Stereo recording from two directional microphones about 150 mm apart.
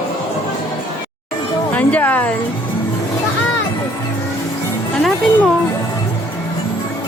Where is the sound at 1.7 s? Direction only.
10° left (ahead or behind).